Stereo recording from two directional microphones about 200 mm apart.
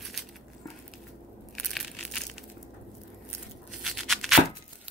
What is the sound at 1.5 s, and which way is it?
Crushing, centre (ahead or behind).